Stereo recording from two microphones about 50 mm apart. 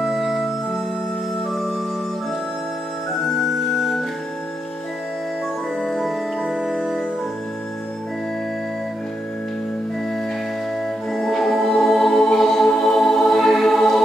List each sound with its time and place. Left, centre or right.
0.0 s music: centre
1.5 s organ: centre
5.8 s music: centre
11.1 s music: centre